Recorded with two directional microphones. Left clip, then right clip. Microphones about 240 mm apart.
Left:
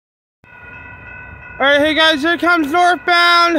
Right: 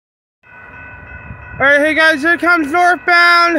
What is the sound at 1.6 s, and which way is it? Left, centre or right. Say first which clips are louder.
Speech: right 2 dB; centre.